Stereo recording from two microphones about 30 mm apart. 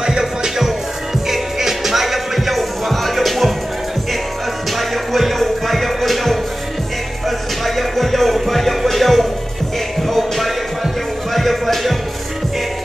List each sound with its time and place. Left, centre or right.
0.4 s music: centre
4.7 s music: centre